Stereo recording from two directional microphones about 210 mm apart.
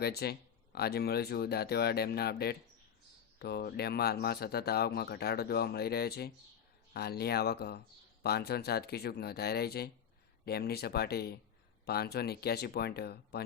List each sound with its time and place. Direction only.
0.0 s speech: 50° left (ahead or behind)